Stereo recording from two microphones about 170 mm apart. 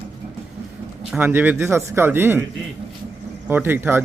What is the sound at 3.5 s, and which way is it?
Speech, 10° right (ahead or behind).